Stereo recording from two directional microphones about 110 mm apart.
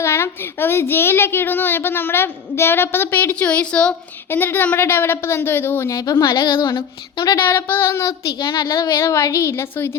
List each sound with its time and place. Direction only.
0.0 s speech: 25° left (ahead or behind)
6.0 s speech: 35° left (ahead or behind)
7.3 s speech: 25° left (ahead or behind)
8.4 s speech: 45° left (ahead or behind); by 10.0 s 20° left (ahead or behind)